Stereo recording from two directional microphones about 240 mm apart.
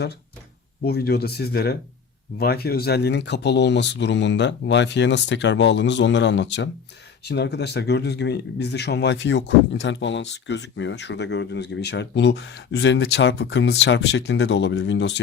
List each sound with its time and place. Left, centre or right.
0.9 s speech: left